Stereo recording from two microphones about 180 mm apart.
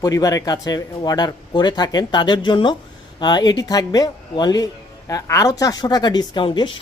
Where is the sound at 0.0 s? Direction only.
20° left (ahead or behind).